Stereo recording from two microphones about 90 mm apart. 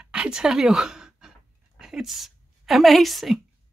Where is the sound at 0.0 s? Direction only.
10° right (ahead or behind).